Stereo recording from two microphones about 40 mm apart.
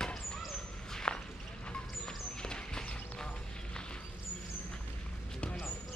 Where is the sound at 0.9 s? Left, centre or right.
Centre.